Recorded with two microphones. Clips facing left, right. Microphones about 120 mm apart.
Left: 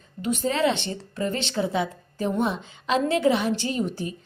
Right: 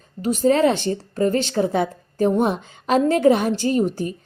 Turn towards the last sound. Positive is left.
turn(degrees=-45)  # may be behind; listen again after turning